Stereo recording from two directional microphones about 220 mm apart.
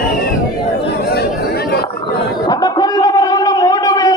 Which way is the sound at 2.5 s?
15° left (ahead or behind).